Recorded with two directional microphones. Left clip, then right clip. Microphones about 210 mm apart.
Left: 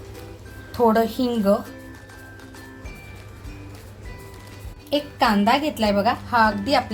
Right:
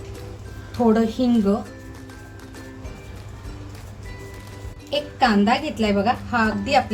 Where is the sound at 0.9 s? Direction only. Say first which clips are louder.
Even; 40° left (ahead or behind).